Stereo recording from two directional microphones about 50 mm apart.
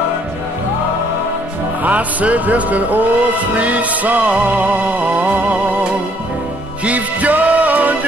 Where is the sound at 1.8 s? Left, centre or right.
Right.